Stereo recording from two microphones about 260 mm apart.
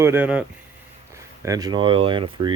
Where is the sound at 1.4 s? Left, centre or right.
Centre.